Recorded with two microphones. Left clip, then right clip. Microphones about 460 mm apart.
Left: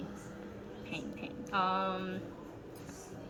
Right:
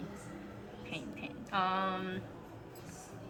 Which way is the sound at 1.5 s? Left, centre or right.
Right.